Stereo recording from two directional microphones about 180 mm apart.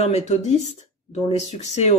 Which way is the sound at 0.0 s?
40° left (ahead or behind).